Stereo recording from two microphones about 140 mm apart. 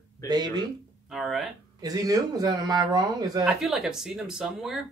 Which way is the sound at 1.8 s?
25° right (ahead or behind).